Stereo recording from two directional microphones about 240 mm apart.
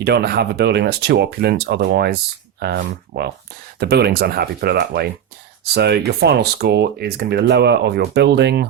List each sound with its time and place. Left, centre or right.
0.0 s speech: right